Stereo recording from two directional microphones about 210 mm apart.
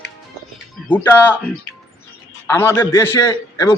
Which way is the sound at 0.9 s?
10° left (ahead or behind).